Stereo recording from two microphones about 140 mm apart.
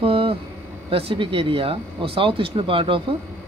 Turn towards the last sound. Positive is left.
turn(degrees=-40)  # may be behind; listen again after turning